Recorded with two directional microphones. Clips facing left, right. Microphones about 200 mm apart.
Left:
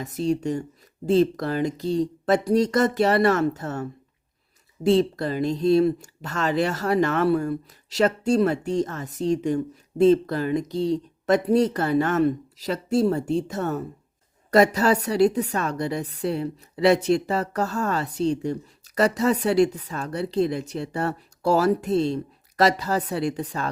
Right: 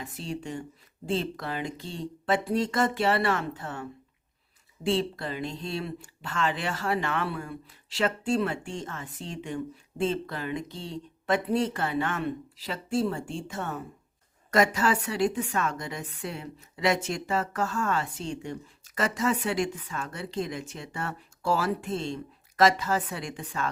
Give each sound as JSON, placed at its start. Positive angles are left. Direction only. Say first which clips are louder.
{"t": 0.0, "sound": "speech", "louder": "left 11 dB", "side_deg": 40}